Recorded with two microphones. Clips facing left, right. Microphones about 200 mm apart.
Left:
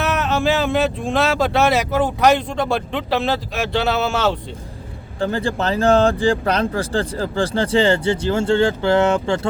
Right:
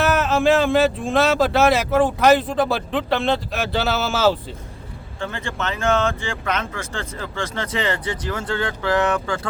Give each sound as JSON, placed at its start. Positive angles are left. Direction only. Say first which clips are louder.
{"t": 0.0, "sound": "speech", "louder": "right 2 dB", "side_deg": 0}
{"t": 5.2, "sound": "speech", "louder": "left 7 dB", "side_deg": 35}